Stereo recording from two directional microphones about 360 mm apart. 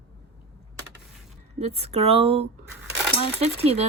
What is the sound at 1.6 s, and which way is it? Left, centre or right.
Speech, centre.